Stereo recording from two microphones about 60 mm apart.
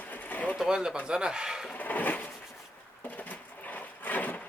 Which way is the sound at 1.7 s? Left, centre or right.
Left.